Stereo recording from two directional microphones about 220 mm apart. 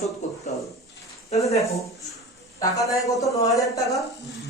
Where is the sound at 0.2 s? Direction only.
30° left (ahead or behind).